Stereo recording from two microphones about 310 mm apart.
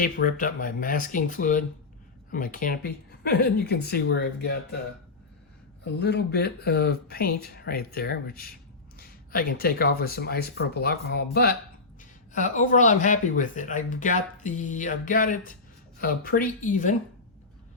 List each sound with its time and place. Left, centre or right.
0.0 s speech: left
5.8 s speech: left